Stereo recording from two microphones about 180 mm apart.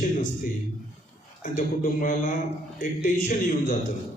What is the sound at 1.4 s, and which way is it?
A man's voice, 45° left (ahead or behind).